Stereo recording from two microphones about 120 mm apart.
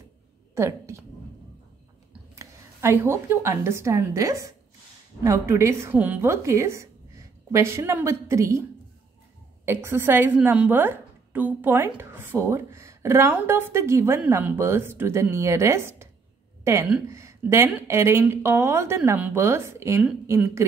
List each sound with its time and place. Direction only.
0.6 s a woman's voice: 25° right (ahead or behind)
2.3 s a woman's voice: 20° right (ahead or behind)
9.7 s a woman's voice: 20° right (ahead or behind)